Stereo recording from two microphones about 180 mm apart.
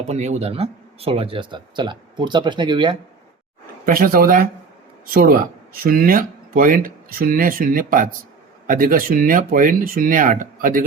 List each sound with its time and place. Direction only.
0.1 s speech: 40° right (ahead or behind)
3.8 s speech: 50° right (ahead or behind)